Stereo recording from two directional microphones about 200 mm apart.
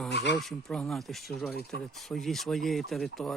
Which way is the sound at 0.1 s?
55° left (ahead or behind).